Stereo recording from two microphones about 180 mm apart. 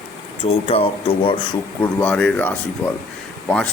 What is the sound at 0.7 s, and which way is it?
Speech, 30° left (ahead or behind).